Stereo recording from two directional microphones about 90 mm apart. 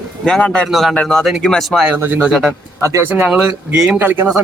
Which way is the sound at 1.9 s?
20° right (ahead or behind).